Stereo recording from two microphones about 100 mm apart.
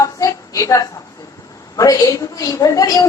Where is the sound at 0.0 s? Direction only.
35° left (ahead or behind).